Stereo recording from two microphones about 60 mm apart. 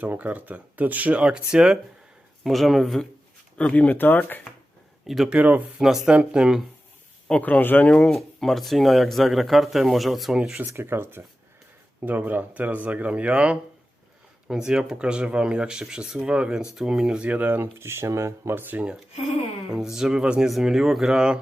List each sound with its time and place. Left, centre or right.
0.0 s speech: right; by 1.8 s centre
2.4 s speech: centre
3.8 s speech: left
5.0 s speech: centre
5.3 s speech: right
5.8 s speech: centre
7.4 s speech: left
7.9 s speech: centre
8.1 s speech: centre
10.7 s speech: right
17.7 s speech: right
18.5 s speech: right
19.7 s speech: centre
20.5 s speech: centre